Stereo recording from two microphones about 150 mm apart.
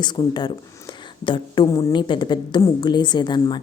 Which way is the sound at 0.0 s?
30° left (ahead or behind).